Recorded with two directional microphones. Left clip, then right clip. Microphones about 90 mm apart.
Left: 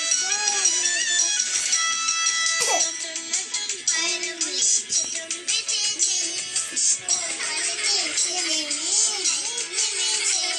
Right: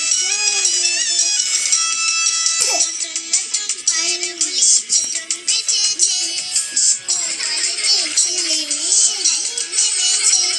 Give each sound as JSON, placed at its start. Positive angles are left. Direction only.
{"t": 0.0, "sound": "music", "side_deg": -35}
{"t": 3.8, "sound": "music", "side_deg": -30}
{"t": 7.5, "sound": "music", "side_deg": -35}